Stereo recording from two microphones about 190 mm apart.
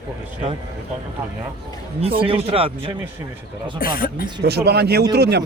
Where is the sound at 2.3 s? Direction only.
30° right (ahead or behind).